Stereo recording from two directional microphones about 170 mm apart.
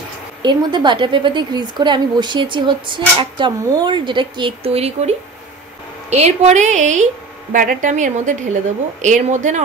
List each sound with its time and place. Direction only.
0.4 s a woman's voice: 25° right (ahead or behind); by 9.6 s 45° right (ahead or behind)